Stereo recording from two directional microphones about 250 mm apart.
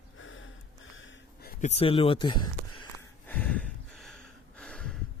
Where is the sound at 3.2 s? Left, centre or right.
Centre.